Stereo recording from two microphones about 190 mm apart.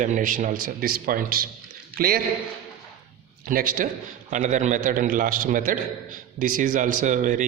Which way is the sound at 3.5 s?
50° right (ahead or behind).